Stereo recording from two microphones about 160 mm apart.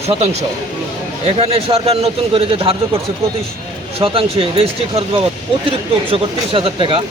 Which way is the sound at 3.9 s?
35° right (ahead or behind).